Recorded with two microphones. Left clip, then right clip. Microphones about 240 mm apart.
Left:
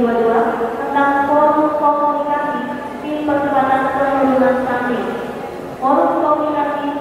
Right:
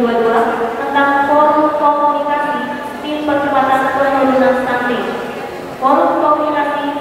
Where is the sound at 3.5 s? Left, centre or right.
Centre.